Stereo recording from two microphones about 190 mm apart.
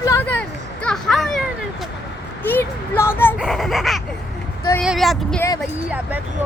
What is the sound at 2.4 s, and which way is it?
Speech, 10° left (ahead or behind).